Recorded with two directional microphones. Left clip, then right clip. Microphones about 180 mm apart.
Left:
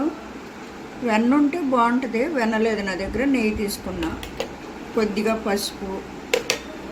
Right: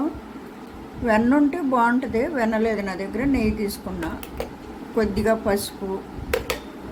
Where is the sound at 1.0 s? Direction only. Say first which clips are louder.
Right 1 dB; 30° right (ahead or behind).